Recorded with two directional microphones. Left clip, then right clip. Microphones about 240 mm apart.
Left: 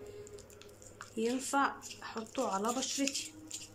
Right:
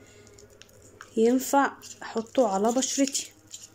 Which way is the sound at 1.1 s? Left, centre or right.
Right.